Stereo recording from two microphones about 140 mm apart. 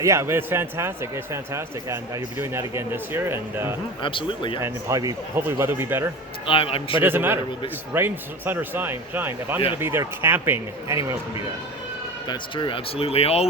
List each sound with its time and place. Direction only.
0.0 s a man's voice: 20° right (ahead or behind)
4.0 s speech: 40° left (ahead or behind)
4.6 s a man's voice: 20° right (ahead or behind)
6.4 s speech: 40° left (ahead or behind)
7.0 s a man's voice: 15° right (ahead or behind)
12.3 s speech: 35° left (ahead or behind)